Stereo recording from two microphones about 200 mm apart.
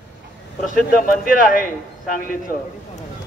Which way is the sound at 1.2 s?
45° left (ahead or behind).